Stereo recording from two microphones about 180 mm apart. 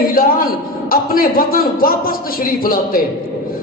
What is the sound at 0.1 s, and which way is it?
A man's voice, 55° left (ahead or behind).